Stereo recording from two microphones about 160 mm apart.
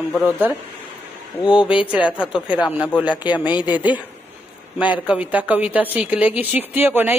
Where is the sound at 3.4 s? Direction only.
30° left (ahead or behind).